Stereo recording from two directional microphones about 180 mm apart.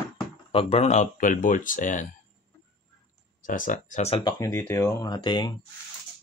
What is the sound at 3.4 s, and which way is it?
Speech, 45° left (ahead or behind).